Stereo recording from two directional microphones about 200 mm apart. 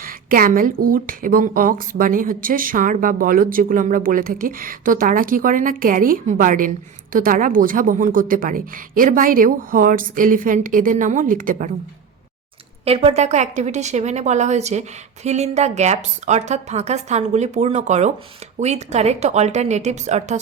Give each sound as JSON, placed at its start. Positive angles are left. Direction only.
{"t": 0.0, "sound": "speech", "side_deg": -45}
{"t": 12.8, "sound": "a woman's voice", "side_deg": -30}